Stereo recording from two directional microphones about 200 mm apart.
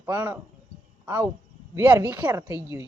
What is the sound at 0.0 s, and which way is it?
Speech, 10° right (ahead or behind).